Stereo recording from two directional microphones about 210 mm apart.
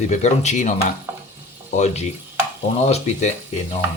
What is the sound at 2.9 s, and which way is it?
Speech, 35° left (ahead or behind).